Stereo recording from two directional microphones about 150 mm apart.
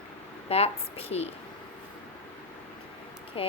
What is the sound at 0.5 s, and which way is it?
Speech, 45° left (ahead or behind).